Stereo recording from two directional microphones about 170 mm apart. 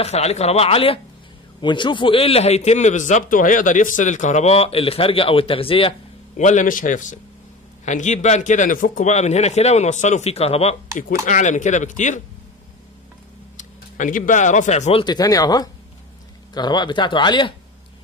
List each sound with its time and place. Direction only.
0.0 s a man's voice: 40° left (ahead or behind)
6.3 s a man's voice: 45° left (ahead or behind)
11.2 s a man's voice: 50° left (ahead or behind)
13.6 s speech: 50° left (ahead or behind); by 17.6 s 25° left (ahead or behind)